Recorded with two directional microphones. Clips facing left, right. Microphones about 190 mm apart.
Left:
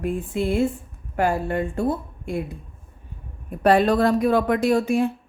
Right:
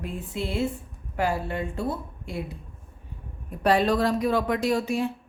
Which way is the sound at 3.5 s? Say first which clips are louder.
Left 4 dB; 55° left (ahead or behind).